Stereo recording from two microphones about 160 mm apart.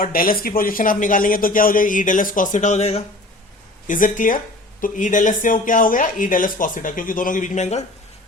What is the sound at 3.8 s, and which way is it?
Speech, 55° left (ahead or behind).